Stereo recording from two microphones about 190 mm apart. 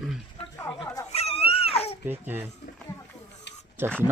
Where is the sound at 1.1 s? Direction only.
30° left (ahead or behind).